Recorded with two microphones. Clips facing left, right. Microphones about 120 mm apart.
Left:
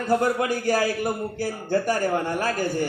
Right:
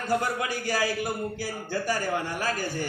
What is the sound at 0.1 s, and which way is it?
A man's voice, 45° left (ahead or behind).